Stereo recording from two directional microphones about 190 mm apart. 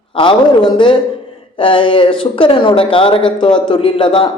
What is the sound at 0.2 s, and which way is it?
A man's voice, 25° left (ahead or behind).